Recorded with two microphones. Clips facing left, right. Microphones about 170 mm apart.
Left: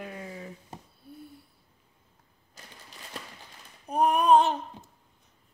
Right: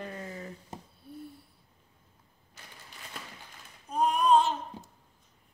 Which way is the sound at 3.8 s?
65° left (ahead or behind).